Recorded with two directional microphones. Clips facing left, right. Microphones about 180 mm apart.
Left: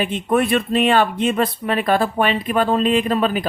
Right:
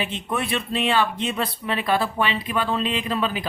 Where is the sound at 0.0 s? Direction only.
50° left (ahead or behind).